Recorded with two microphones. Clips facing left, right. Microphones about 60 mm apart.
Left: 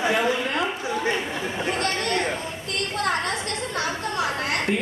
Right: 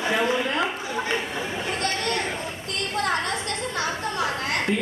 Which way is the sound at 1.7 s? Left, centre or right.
Left.